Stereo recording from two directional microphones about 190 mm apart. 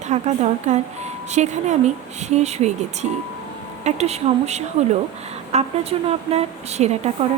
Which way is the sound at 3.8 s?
35° right (ahead or behind).